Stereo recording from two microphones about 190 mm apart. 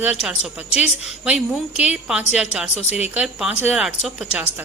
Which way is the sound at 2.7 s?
35° left (ahead or behind).